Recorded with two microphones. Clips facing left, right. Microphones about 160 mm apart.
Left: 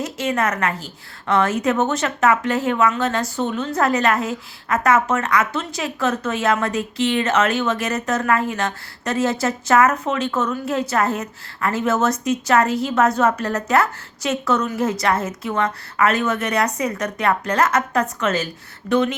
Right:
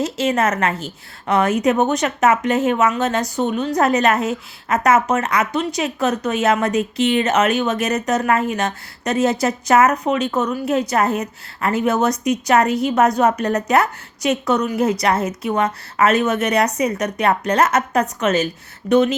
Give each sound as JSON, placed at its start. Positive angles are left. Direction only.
{"t": 0.0, "sound": "a woman's voice", "side_deg": -25}